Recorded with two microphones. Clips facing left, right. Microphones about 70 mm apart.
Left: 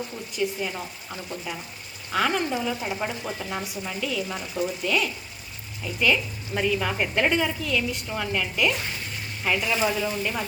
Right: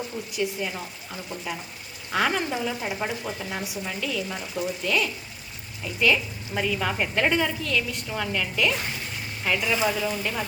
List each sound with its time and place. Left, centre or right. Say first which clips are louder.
0.3 s speech: left 1 dB; centre
2.1 s speech: even; centre
3.2 s speech: left 1 dB; centre